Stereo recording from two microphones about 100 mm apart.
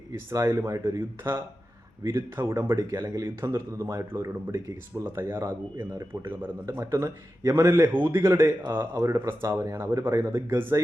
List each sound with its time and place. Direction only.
0.1 s a man's voice: 30° right (ahead or behind)